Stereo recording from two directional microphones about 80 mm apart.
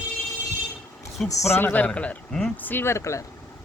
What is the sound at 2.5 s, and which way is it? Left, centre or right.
Speech, left.